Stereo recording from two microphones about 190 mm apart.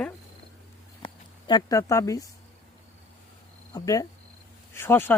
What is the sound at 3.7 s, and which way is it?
Speech, 20° left (ahead or behind).